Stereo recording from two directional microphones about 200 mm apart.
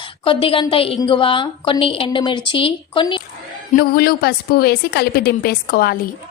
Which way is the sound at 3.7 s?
45° left (ahead or behind).